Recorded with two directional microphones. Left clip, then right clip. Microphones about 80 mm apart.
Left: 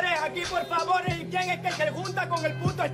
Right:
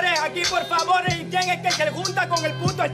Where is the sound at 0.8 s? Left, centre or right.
Centre.